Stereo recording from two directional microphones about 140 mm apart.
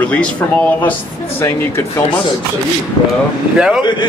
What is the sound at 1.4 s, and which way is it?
Speech, 15° left (ahead or behind).